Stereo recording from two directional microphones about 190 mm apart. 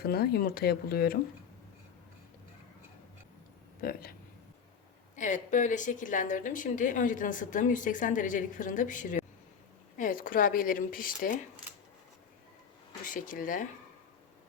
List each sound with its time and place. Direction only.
0.0 s speech: 55° left (ahead or behind)
3.8 s a woman's voice: 50° left (ahead or behind)
5.1 s a woman's voice: 40° left (ahead or behind)
13.1 s a woman's voice: 45° left (ahead or behind)